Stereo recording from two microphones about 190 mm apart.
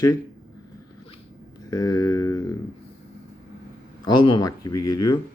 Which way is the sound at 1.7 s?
20° left (ahead or behind).